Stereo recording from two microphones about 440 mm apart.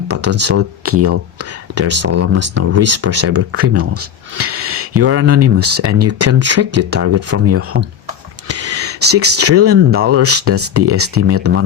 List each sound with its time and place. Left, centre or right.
0.1 s speech: right